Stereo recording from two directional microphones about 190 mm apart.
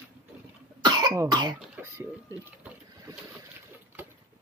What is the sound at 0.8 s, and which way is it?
Cough, 20° right (ahead or behind).